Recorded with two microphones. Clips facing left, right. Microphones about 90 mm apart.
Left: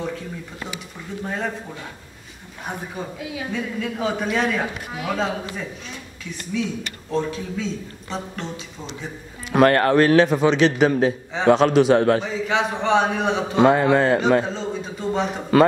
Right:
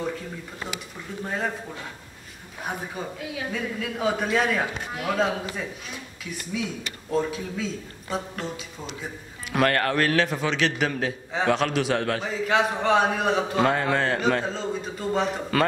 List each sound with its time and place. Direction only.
1.2 s a man's voice: centre (ahead or behind)
2.6 s a man's voice: centre (ahead or behind)
9.5 s a man's voice: 30° left (ahead or behind)
12.2 s a man's voice: centre (ahead or behind)
13.7 s a man's voice: 15° left (ahead or behind)
14.4 s a man's voice: centre (ahead or behind)
15.5 s a man's voice: 20° left (ahead or behind)